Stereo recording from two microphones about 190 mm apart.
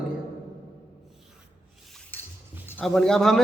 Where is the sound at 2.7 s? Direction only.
5° left (ahead or behind).